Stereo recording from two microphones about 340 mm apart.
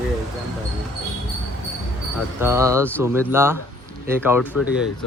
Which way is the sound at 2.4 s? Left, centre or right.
Centre.